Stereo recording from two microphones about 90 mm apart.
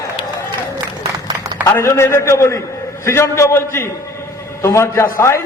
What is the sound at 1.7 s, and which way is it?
A man's voice, 30° left (ahead or behind).